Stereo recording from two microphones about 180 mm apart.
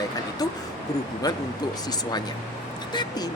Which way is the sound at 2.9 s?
25° left (ahead or behind).